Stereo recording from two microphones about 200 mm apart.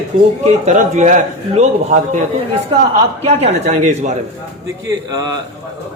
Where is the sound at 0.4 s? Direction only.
35° right (ahead or behind).